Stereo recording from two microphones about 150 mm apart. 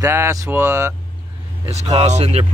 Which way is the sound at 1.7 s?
45° right (ahead or behind).